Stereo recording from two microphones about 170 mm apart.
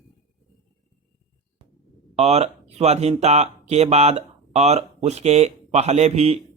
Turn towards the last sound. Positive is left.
turn(degrees=-40)  # may be behind; listen again after turning